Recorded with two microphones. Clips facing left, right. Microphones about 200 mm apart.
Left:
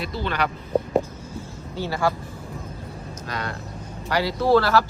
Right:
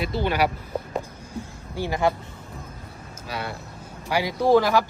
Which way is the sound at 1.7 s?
15° right (ahead or behind).